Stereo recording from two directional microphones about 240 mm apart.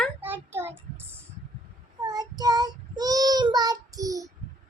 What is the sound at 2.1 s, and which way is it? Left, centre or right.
Child singing, centre.